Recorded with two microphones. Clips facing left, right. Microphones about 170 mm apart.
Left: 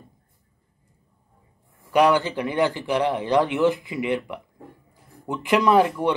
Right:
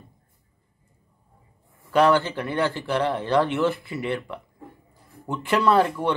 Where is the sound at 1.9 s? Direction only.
15° left (ahead or behind).